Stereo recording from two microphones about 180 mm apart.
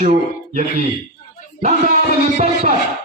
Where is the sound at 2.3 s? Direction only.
35° right (ahead or behind).